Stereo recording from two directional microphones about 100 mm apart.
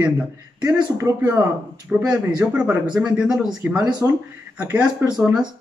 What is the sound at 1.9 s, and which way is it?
A man's voice, 10° right (ahead or behind).